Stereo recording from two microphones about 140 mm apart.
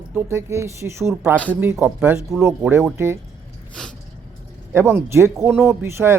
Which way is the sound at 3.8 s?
5° left (ahead or behind).